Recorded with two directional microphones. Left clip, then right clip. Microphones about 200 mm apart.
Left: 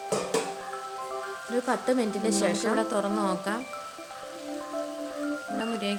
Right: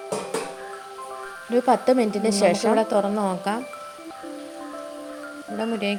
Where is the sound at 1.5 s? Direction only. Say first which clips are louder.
Right 8 dB; 25° right (ahead or behind).